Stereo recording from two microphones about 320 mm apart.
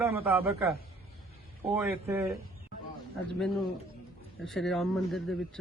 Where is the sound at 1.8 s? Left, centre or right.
Centre.